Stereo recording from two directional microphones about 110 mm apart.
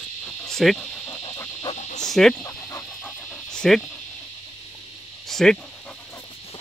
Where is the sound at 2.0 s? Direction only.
5° left (ahead or behind).